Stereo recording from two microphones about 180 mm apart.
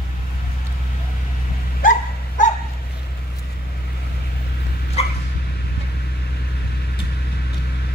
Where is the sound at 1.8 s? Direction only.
50° left (ahead or behind).